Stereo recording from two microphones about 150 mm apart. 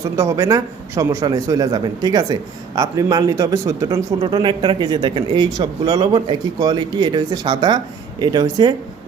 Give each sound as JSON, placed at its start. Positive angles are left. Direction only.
{"t": 0.0, "sound": "speech", "side_deg": -20}